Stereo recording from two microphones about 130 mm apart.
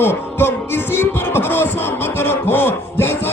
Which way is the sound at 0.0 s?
20° left (ahead or behind).